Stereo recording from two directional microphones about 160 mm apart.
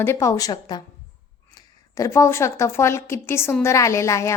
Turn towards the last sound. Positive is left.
turn(degrees=15)  # may be behind; listen again after turning